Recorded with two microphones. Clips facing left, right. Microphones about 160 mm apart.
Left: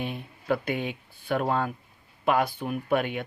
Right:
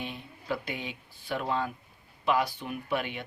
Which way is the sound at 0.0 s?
55° left (ahead or behind).